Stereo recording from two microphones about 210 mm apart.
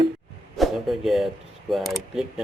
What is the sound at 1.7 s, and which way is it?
Speech, centre (ahead or behind).